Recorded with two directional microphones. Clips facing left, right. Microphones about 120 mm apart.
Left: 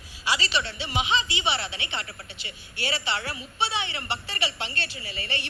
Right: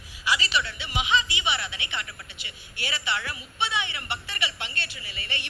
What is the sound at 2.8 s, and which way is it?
A woman's voice, 30° left (ahead or behind).